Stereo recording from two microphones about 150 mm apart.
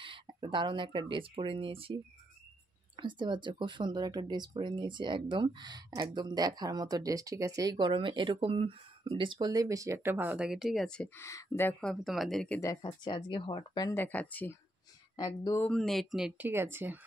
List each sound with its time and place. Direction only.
0.0 s speech: 35° right (ahead or behind)
3.0 s speech: 30° right (ahead or behind); by 11.1 s 5° left (ahead or behind)
11.1 s speech: 20° left (ahead or behind)
11.8 s speech: centre (ahead or behind)
12.5 s speech: 20° left (ahead or behind)
13.0 s speech: 35° left (ahead or behind)
13.8 s speech: 15° left (ahead or behind)
15.1 s speech: 25° left (ahead or behind)
15.6 s speech: 5° left (ahead or behind); by 17.0 s 15° right (ahead or behind)